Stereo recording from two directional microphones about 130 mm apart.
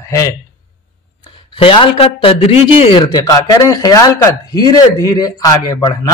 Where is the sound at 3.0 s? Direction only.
30° left (ahead or behind).